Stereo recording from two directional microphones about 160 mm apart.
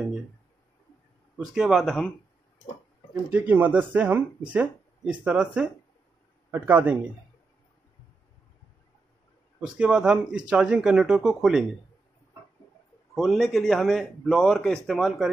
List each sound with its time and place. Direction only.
1.5 s a man's voice: centre (ahead or behind)
3.3 s speech: 10° right (ahead or behind)
9.6 s a man's voice: 5° right (ahead or behind)
13.1 s a man's voice: centre (ahead or behind)